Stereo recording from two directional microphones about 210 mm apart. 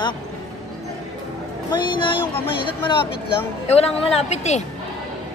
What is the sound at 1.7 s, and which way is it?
A woman's voice, 25° left (ahead or behind).